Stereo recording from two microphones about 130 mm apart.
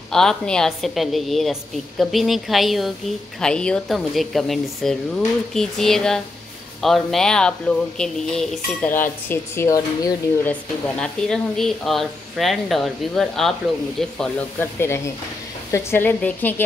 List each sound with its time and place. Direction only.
0.1 s speech: 5° left (ahead or behind); by 10.5 s 20° left (ahead or behind)
10.5 s speech: 5° left (ahead or behind)
14.6 s speech: 20° left (ahead or behind)